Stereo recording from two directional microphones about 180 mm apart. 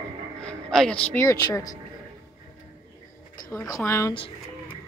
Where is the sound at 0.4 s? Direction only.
5° left (ahead or behind).